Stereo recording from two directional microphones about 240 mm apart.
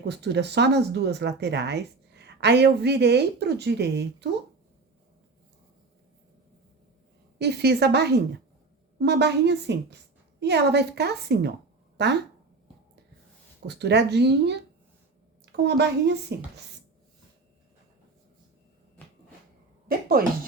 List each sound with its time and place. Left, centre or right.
0.0 s speech: right
7.3 s speech: right
13.7 s speech: right
15.6 s speech: right
19.9 s speech: right